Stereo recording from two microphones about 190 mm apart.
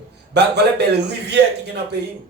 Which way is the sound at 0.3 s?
60° right (ahead or behind).